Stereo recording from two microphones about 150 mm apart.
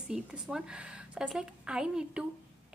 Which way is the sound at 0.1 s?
5° right (ahead or behind).